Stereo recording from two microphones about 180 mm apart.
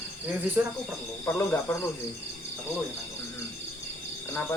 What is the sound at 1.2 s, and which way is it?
Speech, 15° left (ahead or behind).